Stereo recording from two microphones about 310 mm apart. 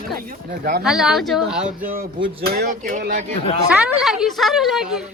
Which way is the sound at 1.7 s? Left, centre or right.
Right.